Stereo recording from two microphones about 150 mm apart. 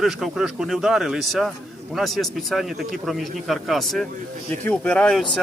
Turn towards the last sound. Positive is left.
turn(degrees=5)  # may be behind; listen again after turning